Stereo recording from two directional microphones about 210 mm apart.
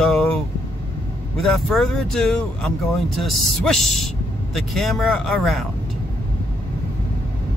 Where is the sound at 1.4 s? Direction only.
Centre (ahead or behind).